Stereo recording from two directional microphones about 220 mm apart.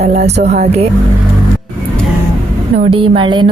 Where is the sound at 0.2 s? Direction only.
30° right (ahead or behind).